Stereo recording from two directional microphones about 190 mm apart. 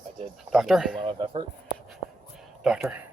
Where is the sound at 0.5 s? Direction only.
Centre (ahead or behind).